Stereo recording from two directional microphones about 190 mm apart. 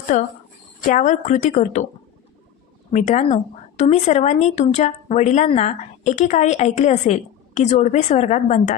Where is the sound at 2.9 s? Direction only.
40° left (ahead or behind).